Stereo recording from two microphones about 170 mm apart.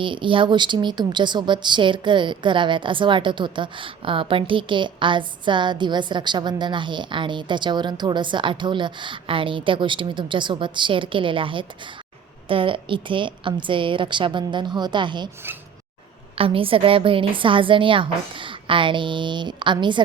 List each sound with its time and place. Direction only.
0.0 s speech: 30° right (ahead or behind)
16.3 s speech: 35° right (ahead or behind)